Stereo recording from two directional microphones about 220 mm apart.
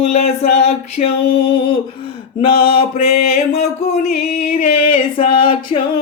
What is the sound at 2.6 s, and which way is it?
Mantra, 25° left (ahead or behind).